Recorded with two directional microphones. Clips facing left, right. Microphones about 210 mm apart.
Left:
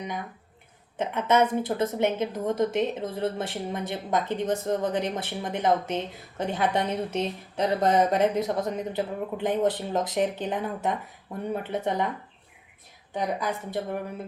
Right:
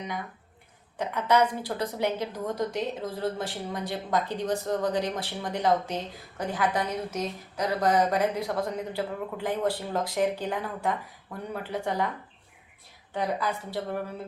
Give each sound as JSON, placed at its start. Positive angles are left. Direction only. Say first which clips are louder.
{"t": 0.9, "sound": "a woman's voice", "louder": "left 1 dB", "side_deg": 20}
{"t": 13.1, "sound": "a woman's voice", "louder": "left 1 dB", "side_deg": 15}